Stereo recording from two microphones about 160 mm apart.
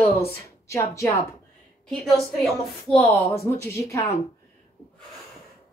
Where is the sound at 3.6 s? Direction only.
20° left (ahead or behind).